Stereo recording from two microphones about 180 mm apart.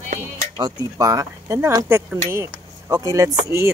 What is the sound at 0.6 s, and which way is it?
Speech, 20° right (ahead or behind).